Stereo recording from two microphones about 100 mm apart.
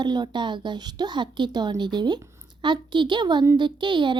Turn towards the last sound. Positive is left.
turn(degrees=-50)  # may be behind; listen again after turning